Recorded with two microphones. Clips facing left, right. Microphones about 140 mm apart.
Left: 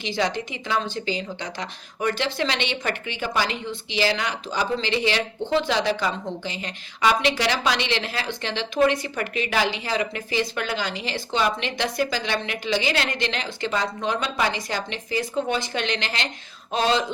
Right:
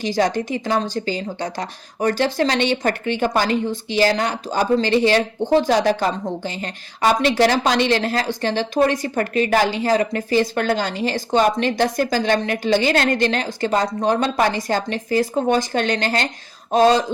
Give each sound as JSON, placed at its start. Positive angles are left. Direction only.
{"t": 0.0, "sound": "a woman's voice", "side_deg": -45}